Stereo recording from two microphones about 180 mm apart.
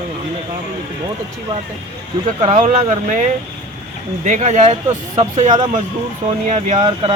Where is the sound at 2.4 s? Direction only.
35° right (ahead or behind).